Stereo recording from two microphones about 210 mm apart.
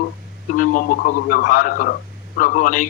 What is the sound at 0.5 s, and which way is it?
A man's voice, 40° left (ahead or behind).